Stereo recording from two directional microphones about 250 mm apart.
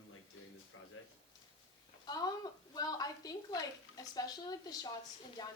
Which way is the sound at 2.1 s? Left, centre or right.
Centre.